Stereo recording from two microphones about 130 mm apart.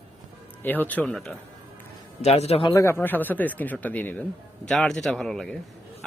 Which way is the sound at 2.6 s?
25° left (ahead or behind).